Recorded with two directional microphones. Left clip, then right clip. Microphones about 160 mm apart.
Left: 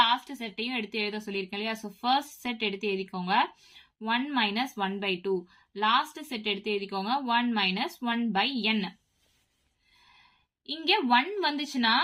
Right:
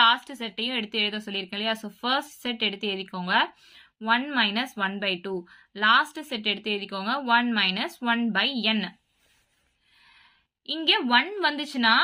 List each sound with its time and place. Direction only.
0.0 s speech: 30° right (ahead or behind)
10.7 s speech: 25° right (ahead or behind)